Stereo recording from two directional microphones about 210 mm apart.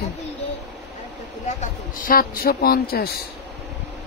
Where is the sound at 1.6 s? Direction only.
40° left (ahead or behind).